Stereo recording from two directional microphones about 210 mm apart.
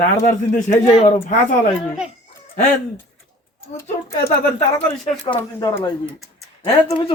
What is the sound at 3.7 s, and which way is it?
Speech, 15° left (ahead or behind).